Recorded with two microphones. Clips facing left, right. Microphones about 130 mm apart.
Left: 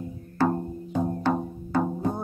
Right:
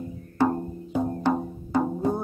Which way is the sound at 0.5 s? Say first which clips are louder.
Even; 5° right (ahead or behind).